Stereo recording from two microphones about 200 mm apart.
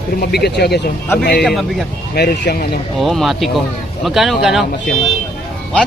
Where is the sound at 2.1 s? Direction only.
50° left (ahead or behind).